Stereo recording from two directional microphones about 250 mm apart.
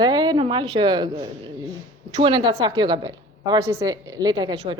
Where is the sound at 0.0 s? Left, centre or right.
Centre.